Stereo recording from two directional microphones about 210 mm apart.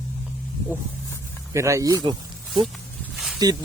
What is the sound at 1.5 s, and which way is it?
Speech, 15° right (ahead or behind).